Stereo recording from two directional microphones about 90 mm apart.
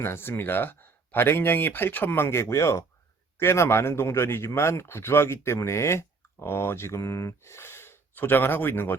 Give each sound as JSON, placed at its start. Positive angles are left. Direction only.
{"t": 0.0, "sound": "speech", "side_deg": 25}